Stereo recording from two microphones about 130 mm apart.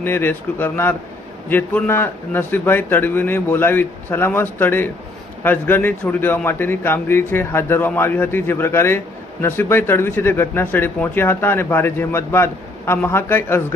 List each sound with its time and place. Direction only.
0.0 s speech: 15° left (ahead or behind)